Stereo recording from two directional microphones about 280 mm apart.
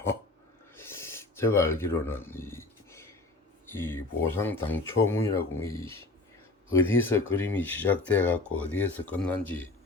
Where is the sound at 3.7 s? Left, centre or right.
Centre.